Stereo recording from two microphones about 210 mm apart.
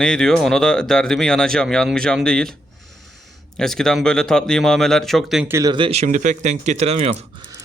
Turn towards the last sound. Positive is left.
turn(degrees=-30)  # may be behind; listen again after turning